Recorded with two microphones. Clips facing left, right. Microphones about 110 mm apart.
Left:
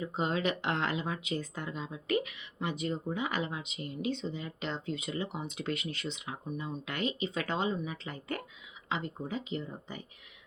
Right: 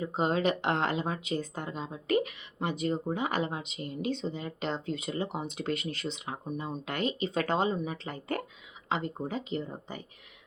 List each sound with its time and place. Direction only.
0.0 s speech: 35° right (ahead or behind)